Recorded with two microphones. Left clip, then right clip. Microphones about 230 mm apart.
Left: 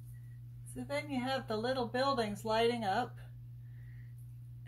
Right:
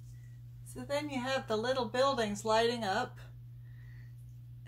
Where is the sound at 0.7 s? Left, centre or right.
Centre.